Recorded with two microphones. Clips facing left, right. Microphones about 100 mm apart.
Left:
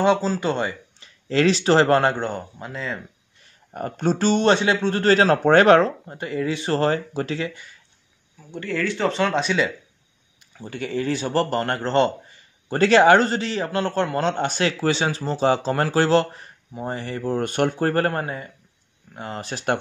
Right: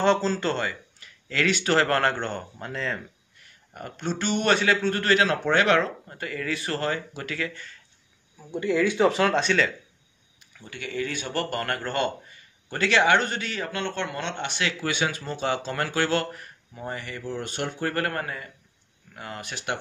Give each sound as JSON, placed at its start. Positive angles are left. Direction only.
{"t": 0.0, "sound": "speech", "side_deg": 10}
{"t": 3.7, "sound": "speech", "side_deg": 40}
{"t": 7.3, "sound": "speech", "side_deg": 15}
{"t": 8.4, "sound": "speech", "side_deg": -10}
{"t": 10.5, "sound": "speech", "side_deg": 35}
{"t": 17.2, "sound": "speech", "side_deg": 50}